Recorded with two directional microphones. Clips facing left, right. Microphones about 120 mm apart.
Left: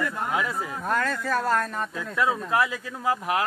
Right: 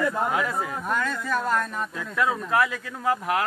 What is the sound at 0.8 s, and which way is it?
Speech, 40° left (ahead or behind).